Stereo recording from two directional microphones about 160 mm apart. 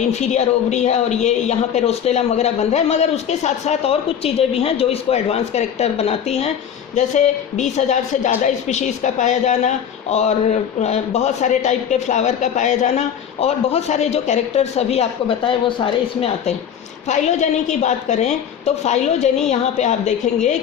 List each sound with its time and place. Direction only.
0.1 s a man's voice: 45° left (ahead or behind)
17.1 s a man's voice: 45° left (ahead or behind)